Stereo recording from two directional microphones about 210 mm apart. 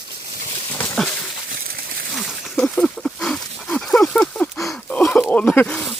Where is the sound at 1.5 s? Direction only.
45° right (ahead or behind).